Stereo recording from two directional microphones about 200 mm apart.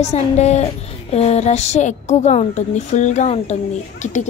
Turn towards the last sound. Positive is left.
turn(degrees=35)  # may be behind; listen again after turning